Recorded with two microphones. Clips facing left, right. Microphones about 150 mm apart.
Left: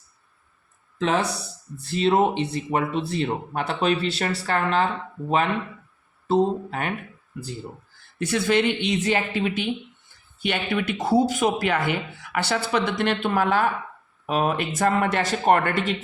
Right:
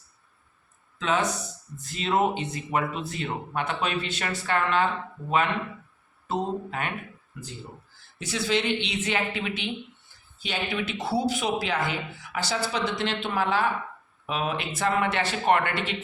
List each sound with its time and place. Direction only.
1.0 s speech: 35° left (ahead or behind)
6.2 s speech: 35° left (ahead or behind)
8.2 s speech: 55° left (ahead or behind); by 9.6 s 35° left (ahead or behind)
10.4 s speech: 60° left (ahead or behind); by 16.0 s 40° left (ahead or behind)